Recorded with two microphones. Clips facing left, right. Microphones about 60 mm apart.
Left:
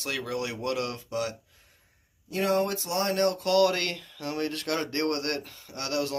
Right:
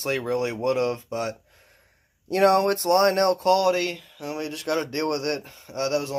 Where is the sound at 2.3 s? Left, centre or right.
Right.